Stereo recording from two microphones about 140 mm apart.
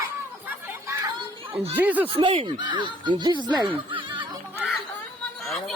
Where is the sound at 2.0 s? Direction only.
40° right (ahead or behind).